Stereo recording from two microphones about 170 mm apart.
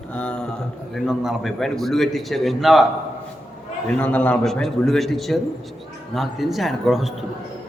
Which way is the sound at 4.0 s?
10° left (ahead or behind).